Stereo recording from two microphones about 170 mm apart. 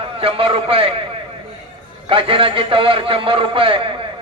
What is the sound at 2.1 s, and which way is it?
A man's voice, 30° right (ahead or behind).